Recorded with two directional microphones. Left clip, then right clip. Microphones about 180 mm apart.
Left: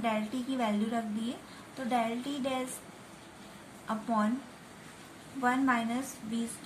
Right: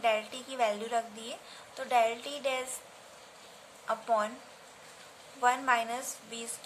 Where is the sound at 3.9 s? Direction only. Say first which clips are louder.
Right 3 dB; 25° right (ahead or behind).